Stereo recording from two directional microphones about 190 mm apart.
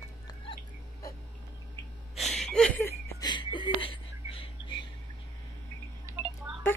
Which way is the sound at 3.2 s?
25° left (ahead or behind).